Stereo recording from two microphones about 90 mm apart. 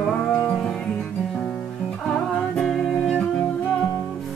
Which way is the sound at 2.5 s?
5° left (ahead or behind).